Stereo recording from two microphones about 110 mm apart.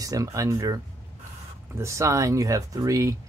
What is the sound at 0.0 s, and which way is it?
Speech, 30° right (ahead or behind).